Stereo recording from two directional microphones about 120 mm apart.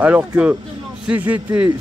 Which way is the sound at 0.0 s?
10° right (ahead or behind).